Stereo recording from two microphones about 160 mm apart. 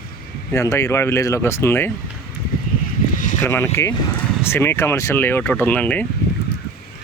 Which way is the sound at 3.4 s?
15° left (ahead or behind).